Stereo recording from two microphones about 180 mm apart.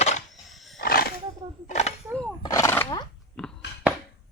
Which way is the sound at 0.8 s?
55° left (ahead or behind).